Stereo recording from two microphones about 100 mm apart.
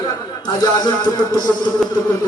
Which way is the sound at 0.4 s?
40° left (ahead or behind).